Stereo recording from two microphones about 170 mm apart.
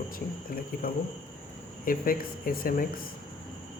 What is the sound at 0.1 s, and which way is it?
Speech, 60° left (ahead or behind).